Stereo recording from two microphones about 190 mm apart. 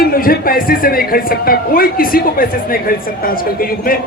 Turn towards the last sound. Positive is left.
turn(degrees=50)  # may be behind; listen again after turning